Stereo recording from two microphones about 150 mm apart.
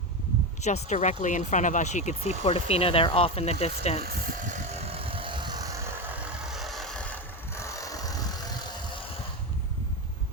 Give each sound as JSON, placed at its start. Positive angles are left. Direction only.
{"t": 0.6, "sound": "speech", "side_deg": 50}
{"t": 4.0, "sound": "vehicle", "side_deg": -65}
{"t": 4.9, "sound": "vehicle", "side_deg": -35}
{"t": 6.5, "sound": "vehicle", "side_deg": 0}
{"t": 7.5, "sound": "vehicle", "side_deg": 20}